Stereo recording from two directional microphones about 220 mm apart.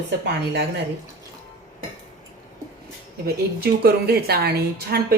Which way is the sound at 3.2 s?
45° right (ahead or behind).